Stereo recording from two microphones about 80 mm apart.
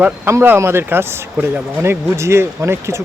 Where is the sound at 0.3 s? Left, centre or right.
Right.